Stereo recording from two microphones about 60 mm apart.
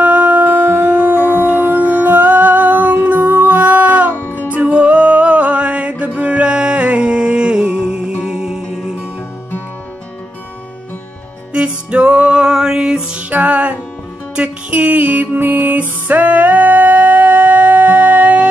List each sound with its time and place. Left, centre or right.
0.0 s music: right
4.2 s music: left
4.6 s music: right
11.5 s music: centre
13.3 s music: right